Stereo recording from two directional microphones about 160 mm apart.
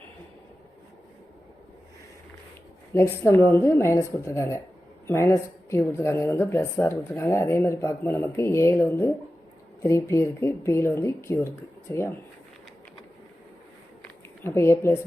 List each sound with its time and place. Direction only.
2.9 s a woman's voice: 15° left (ahead or behind)
14.4 s a woman's voice: 15° left (ahead or behind)